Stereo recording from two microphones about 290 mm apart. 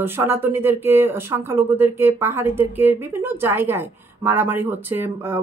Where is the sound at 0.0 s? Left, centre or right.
Centre.